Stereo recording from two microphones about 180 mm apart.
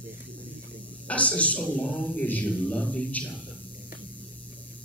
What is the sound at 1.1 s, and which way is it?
A man's voice, 5° left (ahead or behind).